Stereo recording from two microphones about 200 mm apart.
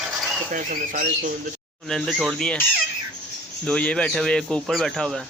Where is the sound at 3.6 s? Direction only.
5° left (ahead or behind).